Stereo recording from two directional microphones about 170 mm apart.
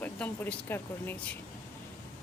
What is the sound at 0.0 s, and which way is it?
Speech, 10° left (ahead or behind).